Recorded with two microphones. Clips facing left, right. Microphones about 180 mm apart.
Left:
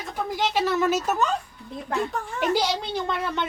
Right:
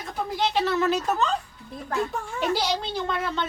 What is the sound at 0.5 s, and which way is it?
Speech, 5° left (ahead or behind).